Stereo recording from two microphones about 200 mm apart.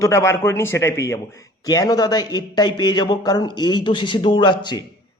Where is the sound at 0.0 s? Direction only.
15° left (ahead or behind).